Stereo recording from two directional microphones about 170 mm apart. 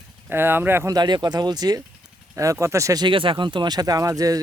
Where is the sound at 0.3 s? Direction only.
10° right (ahead or behind).